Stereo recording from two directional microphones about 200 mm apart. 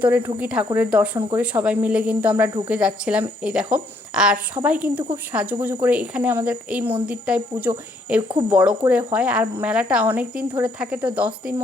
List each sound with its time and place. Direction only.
0.0 s a woman's voice: 10° right (ahead or behind)